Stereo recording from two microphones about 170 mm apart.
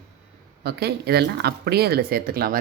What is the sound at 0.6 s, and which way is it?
Speech, 70° right (ahead or behind).